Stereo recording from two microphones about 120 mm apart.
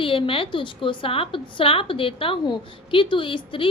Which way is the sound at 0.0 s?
45° left (ahead or behind).